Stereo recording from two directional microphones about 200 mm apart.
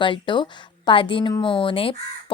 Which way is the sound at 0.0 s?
25° left (ahead or behind).